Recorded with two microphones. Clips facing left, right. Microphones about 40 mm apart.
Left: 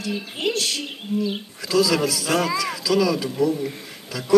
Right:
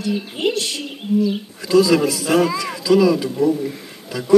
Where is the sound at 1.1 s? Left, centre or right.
Left.